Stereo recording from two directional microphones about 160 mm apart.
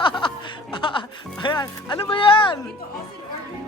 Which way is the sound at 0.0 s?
30° left (ahead or behind).